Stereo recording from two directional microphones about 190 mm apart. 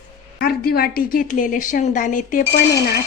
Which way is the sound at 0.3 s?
55° left (ahead or behind).